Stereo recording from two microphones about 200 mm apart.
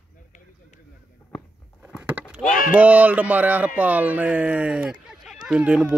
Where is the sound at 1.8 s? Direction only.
5° right (ahead or behind).